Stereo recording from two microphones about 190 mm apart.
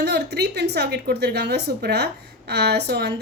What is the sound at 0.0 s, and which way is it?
Speech, 60° right (ahead or behind).